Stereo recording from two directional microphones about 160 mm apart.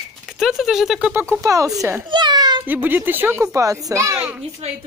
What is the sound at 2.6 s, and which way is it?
A child's voice, 10° right (ahead or behind).